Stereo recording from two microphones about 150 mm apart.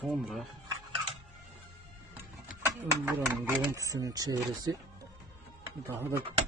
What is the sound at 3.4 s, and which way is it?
Speech, 20° right (ahead or behind).